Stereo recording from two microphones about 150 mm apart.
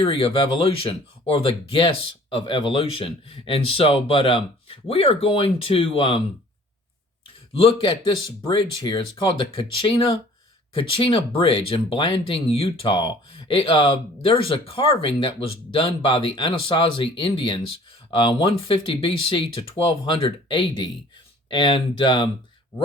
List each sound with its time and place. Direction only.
0.0 s speech: 35° left (ahead or behind)
7.5 s speech: 35° left (ahead or behind)